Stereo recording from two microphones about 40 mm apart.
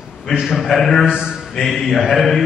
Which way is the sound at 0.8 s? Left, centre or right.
Centre.